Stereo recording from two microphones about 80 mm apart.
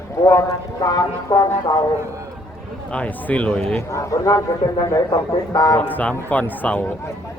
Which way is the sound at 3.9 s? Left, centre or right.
Left.